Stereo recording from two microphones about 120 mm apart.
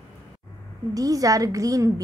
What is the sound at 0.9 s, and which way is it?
A woman's voice, 30° right (ahead or behind).